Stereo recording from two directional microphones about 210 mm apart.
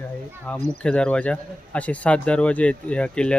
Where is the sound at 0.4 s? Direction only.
5° left (ahead or behind).